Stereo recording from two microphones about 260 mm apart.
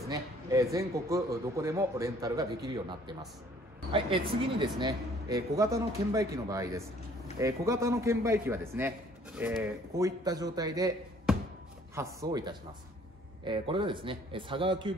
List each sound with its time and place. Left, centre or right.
0.0 s a man's voice: centre